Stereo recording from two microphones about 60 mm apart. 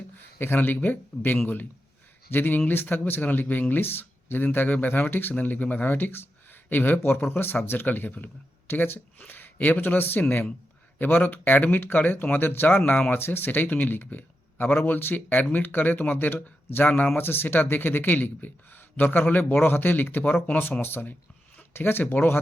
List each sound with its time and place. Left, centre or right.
0.3 s speech: left